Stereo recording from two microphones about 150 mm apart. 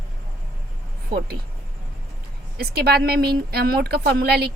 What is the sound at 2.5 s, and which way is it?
A woman's voice, 90° right.